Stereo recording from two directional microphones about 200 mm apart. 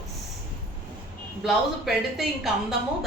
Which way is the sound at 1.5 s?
Centre (ahead or behind).